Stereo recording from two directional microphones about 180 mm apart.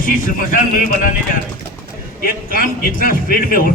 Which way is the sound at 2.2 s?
55° left (ahead or behind).